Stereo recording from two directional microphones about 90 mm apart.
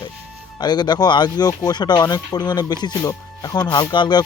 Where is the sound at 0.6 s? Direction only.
50° left (ahead or behind).